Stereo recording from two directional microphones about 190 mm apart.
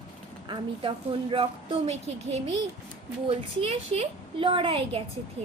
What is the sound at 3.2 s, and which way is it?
A woman's voice, 30° right (ahead or behind).